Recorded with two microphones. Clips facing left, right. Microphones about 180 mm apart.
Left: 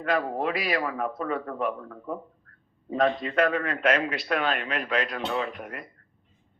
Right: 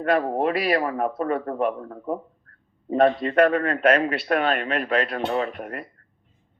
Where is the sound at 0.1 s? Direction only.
50° right (ahead or behind).